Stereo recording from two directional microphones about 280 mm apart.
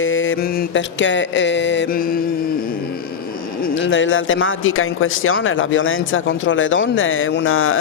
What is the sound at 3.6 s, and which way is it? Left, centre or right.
Speech, left.